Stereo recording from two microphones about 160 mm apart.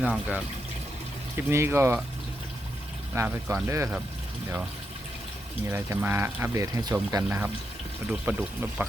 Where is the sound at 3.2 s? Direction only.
15° right (ahead or behind).